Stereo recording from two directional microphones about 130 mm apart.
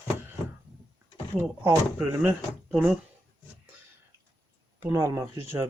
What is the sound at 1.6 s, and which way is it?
Speech, 20° right (ahead or behind).